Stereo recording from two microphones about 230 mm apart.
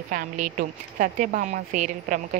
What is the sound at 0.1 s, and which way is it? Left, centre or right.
Speech, right.